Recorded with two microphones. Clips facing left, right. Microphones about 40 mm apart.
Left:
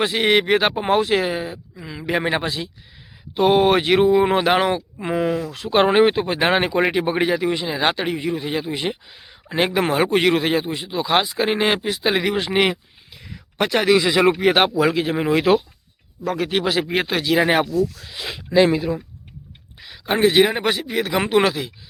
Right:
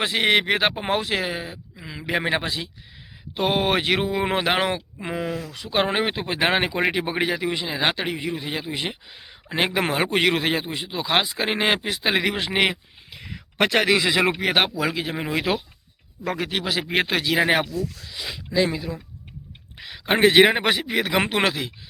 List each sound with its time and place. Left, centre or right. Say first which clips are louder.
0.2 s speech: left 2 dB; centre
5.7 s speech: left 7 dB; left
6.1 s speech: left 4 dB; centre
13.1 s a sound: right 2 dB; right
13.7 s speech: left 4 dB; centre
14.8 s speech: left 7 dB; centre
16.2 s speech: left 4 dB; centre
16.5 s speech: left 8 dB; centre
17.1 s speech: left 3 dB; centre
17.7 s speech: left 8 dB; left
18.1 s speech: left 6 dB; left
20.1 s speech: even; right
20.3 s a man's voice: right 1 dB; right
21.2 s speech: left 5 dB; centre